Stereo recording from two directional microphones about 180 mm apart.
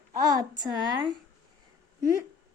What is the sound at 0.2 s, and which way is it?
A woman's voice, 20° right (ahead or behind).